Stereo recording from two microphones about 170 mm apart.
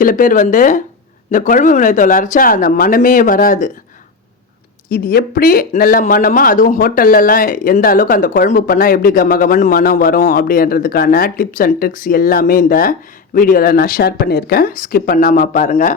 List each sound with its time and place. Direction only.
0.0 s speech: 50° left (ahead or behind)
4.9 s speech: 60° left (ahead or behind)